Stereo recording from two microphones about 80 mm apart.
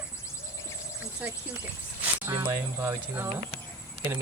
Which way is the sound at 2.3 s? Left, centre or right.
Right.